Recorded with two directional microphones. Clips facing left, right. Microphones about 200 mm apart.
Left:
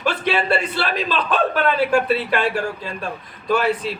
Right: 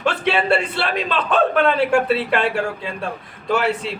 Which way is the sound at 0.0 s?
25° right (ahead or behind).